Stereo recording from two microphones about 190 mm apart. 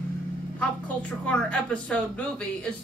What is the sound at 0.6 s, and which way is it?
A woman's voice, 5° left (ahead or behind).